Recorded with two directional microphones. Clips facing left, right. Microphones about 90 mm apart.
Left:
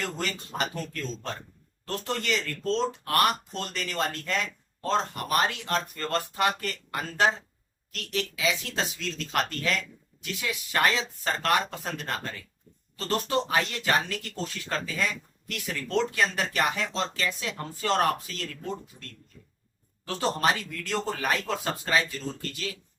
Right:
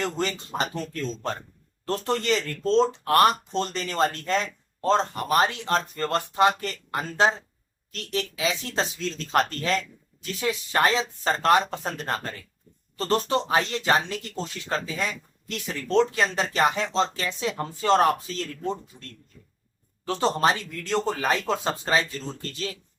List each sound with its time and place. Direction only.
0.2 s speech: 30° right (ahead or behind)
1.8 s speech: 35° right (ahead or behind)
20.1 s speech: 30° right (ahead or behind)